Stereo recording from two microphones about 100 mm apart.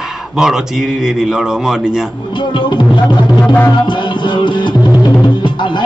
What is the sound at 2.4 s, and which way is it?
Music, 50° left (ahead or behind).